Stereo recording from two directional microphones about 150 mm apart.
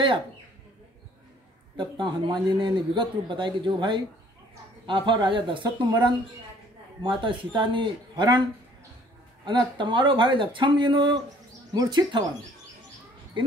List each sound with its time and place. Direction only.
1.8 s a man's voice: 30° right (ahead or behind)
9.5 s a man's voice: 30° right (ahead or behind)
11.7 s insect: 25° right (ahead or behind)